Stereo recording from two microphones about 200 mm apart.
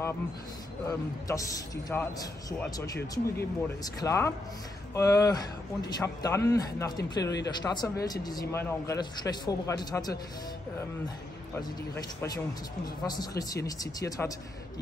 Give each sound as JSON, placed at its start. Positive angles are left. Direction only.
{"t": 0.8, "sound": "a man's voice", "side_deg": 15}
{"t": 3.3, "sound": "a man's voice", "side_deg": 15}
{"t": 11.5, "sound": "a man's voice", "side_deg": 15}